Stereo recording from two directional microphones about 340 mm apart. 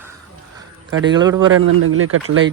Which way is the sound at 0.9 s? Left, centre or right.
Right.